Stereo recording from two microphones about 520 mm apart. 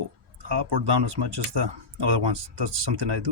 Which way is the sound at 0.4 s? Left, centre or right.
Right.